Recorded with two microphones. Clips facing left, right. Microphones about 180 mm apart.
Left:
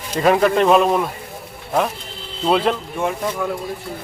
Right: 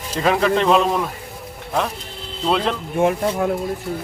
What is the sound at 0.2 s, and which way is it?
Speech, 5° left (ahead or behind).